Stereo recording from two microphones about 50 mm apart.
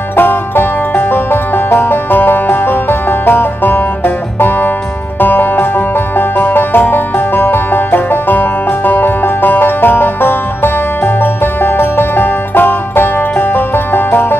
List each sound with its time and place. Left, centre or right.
0.1 s music: left